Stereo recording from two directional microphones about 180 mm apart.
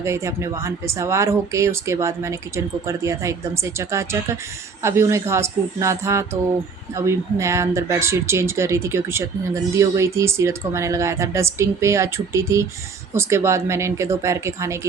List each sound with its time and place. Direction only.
0.0 s a woman's voice: 15° right (ahead or behind)